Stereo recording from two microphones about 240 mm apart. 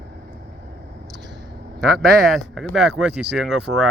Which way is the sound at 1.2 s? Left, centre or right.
Centre.